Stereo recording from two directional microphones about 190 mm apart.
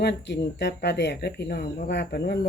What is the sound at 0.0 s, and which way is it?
Speech, 65° left (ahead or behind).